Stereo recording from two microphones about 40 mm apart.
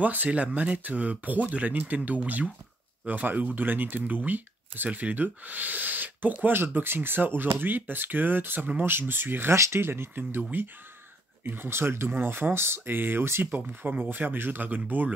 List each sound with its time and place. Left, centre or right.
0.0 s speech: right
3.3 s speech: right
6.4 s speech: right
12.8 s speech: right
13.5 s speech: right